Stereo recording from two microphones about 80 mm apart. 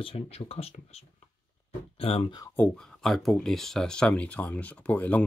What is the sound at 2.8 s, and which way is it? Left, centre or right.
Speech, centre.